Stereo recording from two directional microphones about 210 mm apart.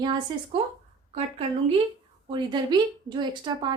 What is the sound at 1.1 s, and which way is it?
A woman's voice, 30° right (ahead or behind).